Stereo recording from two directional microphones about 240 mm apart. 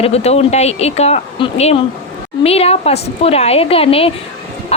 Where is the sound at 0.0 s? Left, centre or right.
Left.